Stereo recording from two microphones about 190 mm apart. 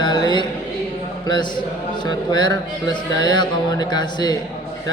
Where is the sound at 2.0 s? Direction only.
20° left (ahead or behind).